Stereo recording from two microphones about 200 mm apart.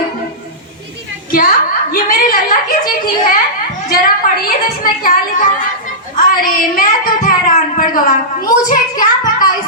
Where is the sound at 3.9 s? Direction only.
45° left (ahead or behind).